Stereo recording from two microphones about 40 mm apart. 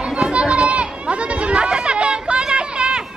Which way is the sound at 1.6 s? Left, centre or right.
Centre.